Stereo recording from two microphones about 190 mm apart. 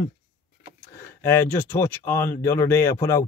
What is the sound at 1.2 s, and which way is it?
Speech, 15° left (ahead or behind).